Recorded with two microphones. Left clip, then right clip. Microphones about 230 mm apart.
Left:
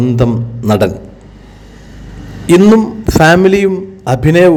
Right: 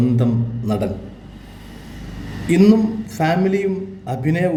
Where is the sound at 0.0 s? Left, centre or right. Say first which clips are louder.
Left 7 dB; left.